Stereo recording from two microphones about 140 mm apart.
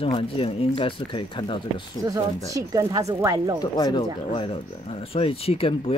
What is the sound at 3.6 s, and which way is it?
Speech, 30° left (ahead or behind).